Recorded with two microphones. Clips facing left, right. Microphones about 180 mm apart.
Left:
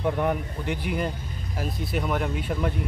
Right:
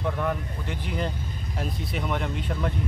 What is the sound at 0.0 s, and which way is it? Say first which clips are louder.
Speech: left 3 dB; 15° left (ahead or behind).